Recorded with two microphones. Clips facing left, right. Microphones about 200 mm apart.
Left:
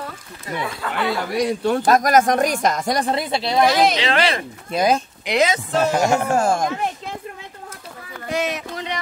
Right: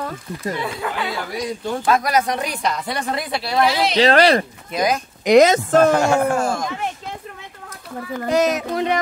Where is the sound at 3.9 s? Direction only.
40° right (ahead or behind).